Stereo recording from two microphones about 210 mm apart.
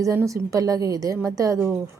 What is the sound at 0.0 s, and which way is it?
Speech, 15° right (ahead or behind).